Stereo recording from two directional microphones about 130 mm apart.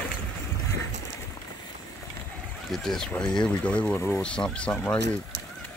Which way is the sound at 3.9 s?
20° left (ahead or behind).